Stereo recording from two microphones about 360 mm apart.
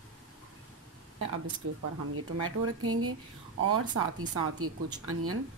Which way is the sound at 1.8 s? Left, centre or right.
Right.